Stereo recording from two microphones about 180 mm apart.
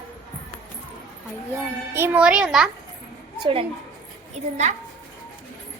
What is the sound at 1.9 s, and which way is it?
Speech, 10° right (ahead or behind).